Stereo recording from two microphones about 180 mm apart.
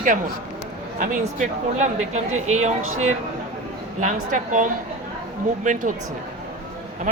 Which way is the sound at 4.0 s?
45° right (ahead or behind).